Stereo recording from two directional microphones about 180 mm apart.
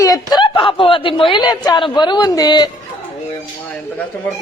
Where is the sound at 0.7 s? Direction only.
30° left (ahead or behind).